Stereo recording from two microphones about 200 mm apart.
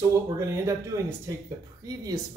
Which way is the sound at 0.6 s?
15° right (ahead or behind).